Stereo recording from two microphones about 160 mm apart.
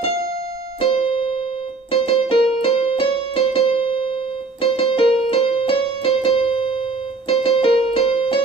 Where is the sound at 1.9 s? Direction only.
35° left (ahead or behind).